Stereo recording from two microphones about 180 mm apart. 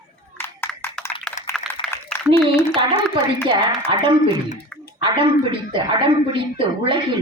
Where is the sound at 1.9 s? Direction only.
15° left (ahead or behind).